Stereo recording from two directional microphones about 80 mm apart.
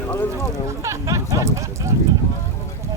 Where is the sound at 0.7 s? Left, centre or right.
Right.